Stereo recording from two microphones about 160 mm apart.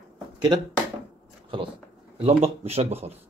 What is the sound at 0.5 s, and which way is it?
Speech, 30° right (ahead or behind).